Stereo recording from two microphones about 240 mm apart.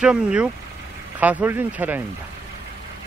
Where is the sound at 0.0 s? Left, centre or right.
Centre.